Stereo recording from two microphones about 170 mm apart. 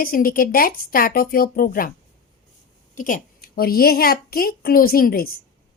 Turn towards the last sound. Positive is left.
turn(degrees=60)  # may be behind; listen again after turning